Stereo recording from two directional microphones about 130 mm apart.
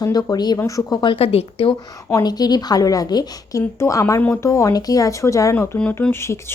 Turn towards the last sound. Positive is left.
turn(degrees=20)  # may be behind; listen again after turning